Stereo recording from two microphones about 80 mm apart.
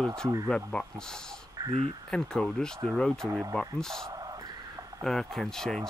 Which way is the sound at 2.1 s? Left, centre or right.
Centre.